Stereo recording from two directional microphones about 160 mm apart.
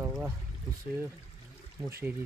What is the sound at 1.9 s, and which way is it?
Speech, 15° right (ahead or behind).